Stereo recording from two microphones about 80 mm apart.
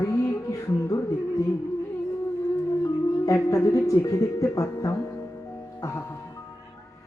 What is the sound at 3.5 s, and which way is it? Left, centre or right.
Speech, left.